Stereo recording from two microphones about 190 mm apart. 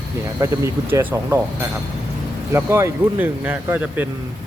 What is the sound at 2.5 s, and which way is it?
Speech, 15° right (ahead or behind).